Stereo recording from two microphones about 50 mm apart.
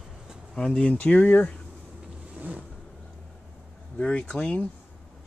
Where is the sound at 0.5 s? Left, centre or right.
Centre.